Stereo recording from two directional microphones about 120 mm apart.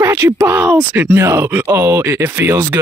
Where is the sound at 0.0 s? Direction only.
25° right (ahead or behind).